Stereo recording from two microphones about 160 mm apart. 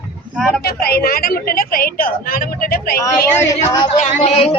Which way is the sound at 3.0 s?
20° left (ahead or behind).